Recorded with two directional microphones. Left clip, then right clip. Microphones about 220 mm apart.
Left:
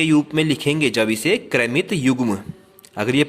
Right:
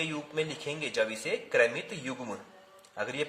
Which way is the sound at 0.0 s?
40° left (ahead or behind).